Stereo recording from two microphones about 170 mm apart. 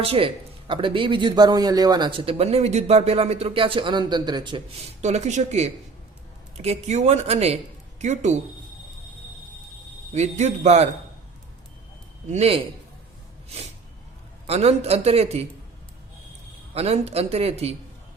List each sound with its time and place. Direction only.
0.0 s speech: 35° right (ahead or behind)
10.1 s speech: 40° right (ahead or behind)
12.3 s speech: 35° right (ahead or behind)
14.4 s speech: 40° right (ahead or behind)
16.7 s speech: 40° right (ahead or behind)